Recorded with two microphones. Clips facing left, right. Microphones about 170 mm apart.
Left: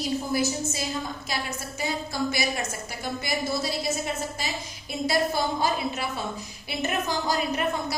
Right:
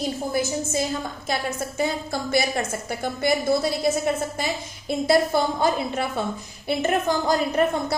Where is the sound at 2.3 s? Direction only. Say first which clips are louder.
Right 6 dB; 55° right (ahead or behind).